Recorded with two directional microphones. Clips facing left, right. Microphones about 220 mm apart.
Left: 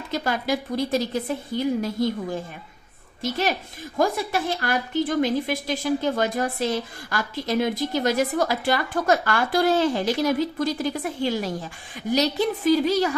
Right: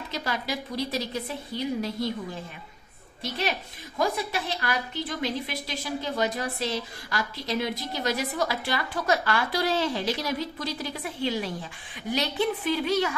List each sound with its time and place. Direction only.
0.1 s a woman's voice: 50° left (ahead or behind)
3.2 s a woman's voice: 45° left (ahead or behind)